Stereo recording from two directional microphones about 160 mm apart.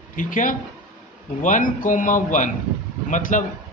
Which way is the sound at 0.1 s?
55° left (ahead or behind).